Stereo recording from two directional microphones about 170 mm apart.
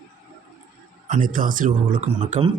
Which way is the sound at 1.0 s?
50° right (ahead or behind).